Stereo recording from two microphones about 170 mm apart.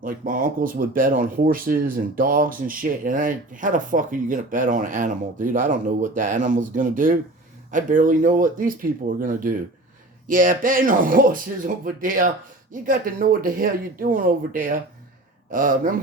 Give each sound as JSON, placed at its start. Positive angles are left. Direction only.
{"t": 0.0, "sound": "speech", "side_deg": -55}